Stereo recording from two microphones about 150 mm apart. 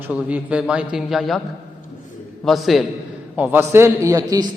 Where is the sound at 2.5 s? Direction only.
Centre (ahead or behind).